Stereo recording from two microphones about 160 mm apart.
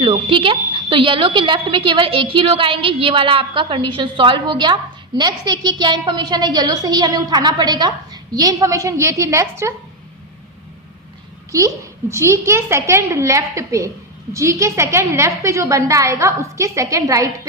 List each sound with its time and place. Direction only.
0.0 s a woman's voice: 30° right (ahead or behind)
11.5 s a woman's voice: 20° right (ahead or behind)